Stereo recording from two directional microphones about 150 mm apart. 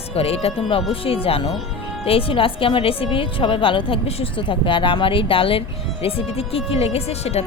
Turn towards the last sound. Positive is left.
turn(degrees=45)  # may be behind; listen again after turning